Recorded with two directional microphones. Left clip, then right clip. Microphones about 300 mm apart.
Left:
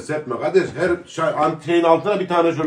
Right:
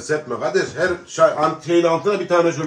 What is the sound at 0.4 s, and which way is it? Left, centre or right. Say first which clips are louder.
Speech: left 4 dB; left.